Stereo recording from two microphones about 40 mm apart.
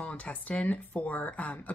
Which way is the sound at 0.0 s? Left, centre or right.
Left.